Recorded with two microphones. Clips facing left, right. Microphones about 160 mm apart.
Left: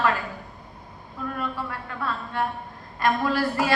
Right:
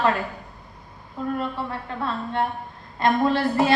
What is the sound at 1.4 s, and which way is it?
A woman's voice, 25° right (ahead or behind).